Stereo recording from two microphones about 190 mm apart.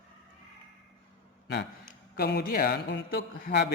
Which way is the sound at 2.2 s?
55° left (ahead or behind).